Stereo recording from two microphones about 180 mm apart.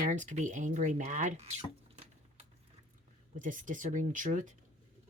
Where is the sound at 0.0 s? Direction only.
45° right (ahead or behind).